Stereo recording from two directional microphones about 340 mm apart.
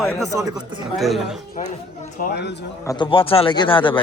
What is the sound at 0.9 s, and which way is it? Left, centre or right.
Speech, centre.